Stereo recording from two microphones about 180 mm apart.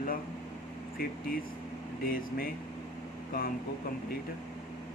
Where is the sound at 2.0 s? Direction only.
55° left (ahead or behind).